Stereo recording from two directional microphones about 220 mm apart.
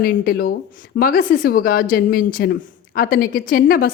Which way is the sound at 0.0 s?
40° left (ahead or behind).